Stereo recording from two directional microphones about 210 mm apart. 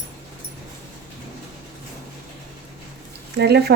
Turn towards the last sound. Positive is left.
turn(degrees=-50)  # may be behind; listen again after turning